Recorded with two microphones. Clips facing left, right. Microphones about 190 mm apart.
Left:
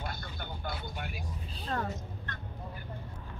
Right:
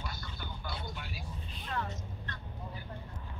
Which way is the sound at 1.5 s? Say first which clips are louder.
Left 4 dB; 35° left (ahead or behind).